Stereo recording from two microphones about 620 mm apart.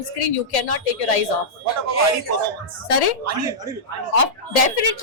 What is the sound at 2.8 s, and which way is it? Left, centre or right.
Speech, left.